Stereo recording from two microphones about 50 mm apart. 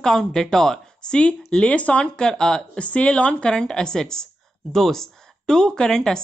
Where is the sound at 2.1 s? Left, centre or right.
Centre.